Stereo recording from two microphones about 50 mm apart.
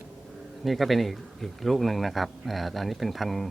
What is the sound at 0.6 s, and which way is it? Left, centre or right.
Speech, centre.